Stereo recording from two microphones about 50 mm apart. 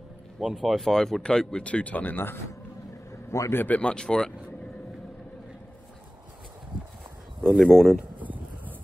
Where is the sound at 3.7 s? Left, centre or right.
Left.